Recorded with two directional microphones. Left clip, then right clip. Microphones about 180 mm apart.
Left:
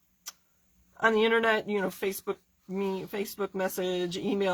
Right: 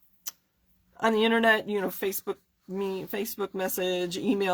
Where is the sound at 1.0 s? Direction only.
40° right (ahead or behind).